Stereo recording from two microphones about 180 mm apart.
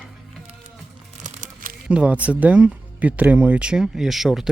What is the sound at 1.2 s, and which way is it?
Crumpling, 45° right (ahead or behind).